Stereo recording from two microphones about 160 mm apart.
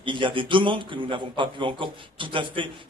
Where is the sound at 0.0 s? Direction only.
30° right (ahead or behind).